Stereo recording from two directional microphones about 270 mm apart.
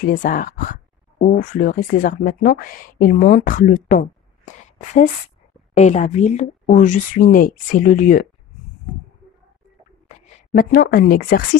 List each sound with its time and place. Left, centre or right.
0.0 s speech: left
10.0 s speech: left